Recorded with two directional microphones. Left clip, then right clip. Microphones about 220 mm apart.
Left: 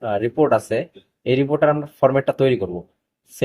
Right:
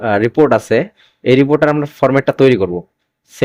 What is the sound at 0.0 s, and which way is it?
A man's voice, 40° right (ahead or behind).